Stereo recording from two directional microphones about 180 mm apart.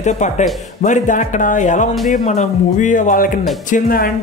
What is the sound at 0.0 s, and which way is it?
Speech, 40° left (ahead or behind).